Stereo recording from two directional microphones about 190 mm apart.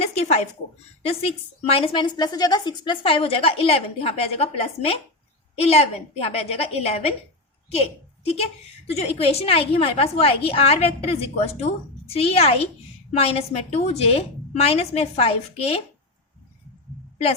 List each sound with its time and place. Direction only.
0.0 s a woman's voice: 35° left (ahead or behind)